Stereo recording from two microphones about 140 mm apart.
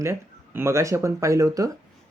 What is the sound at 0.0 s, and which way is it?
Speech, 20° right (ahead or behind).